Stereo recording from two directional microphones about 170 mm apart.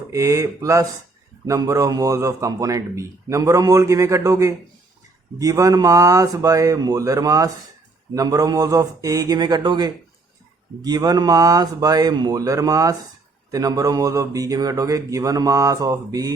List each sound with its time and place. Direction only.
0.1 s speech: 20° right (ahead or behind)